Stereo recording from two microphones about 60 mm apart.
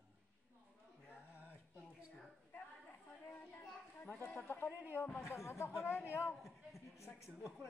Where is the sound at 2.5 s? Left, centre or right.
Left.